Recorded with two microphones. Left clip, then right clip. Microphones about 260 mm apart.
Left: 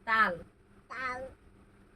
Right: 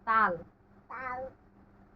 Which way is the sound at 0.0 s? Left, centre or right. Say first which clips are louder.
Right 1 dB; left.